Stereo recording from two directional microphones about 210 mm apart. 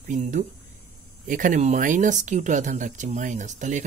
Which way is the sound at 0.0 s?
35° right (ahead or behind).